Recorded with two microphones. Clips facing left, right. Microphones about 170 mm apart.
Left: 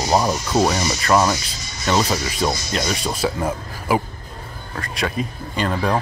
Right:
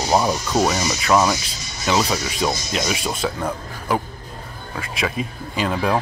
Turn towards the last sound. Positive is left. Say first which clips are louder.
# even
turn(degrees=-5)  # may be behind; listen again after turning